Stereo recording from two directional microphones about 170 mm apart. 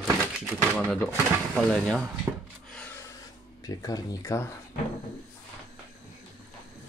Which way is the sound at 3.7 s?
20° left (ahead or behind).